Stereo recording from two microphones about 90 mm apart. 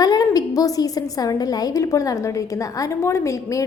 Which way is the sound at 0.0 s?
45° left (ahead or behind).